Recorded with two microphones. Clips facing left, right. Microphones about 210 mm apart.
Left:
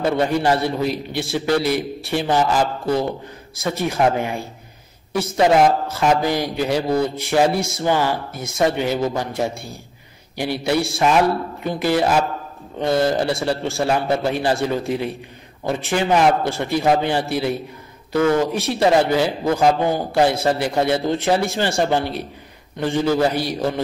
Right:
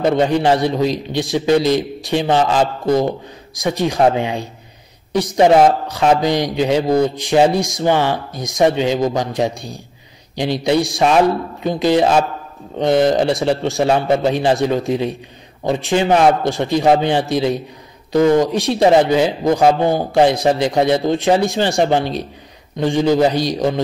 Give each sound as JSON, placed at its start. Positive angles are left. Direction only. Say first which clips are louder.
{"t": 0.0, "sound": "a man's voice", "louder": "right 4 dB", "side_deg": -20}